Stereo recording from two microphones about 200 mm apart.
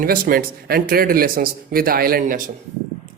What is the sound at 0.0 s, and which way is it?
A man's voice, 45° right (ahead or behind).